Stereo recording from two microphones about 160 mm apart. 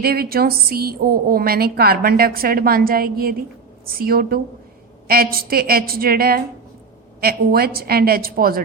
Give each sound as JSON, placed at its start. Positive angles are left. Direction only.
{"t": 0.0, "sound": "a woman's voice", "side_deg": -75}